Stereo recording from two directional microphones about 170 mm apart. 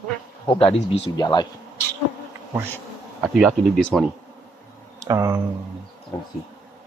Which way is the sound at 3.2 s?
5° right (ahead or behind).